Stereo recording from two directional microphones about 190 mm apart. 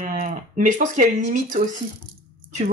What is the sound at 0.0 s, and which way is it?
Speech, 45° right (ahead or behind).